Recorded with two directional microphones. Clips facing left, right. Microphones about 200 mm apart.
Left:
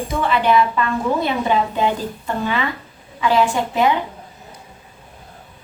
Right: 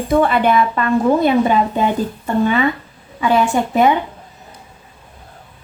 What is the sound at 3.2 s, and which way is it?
Speech, 55° right (ahead or behind).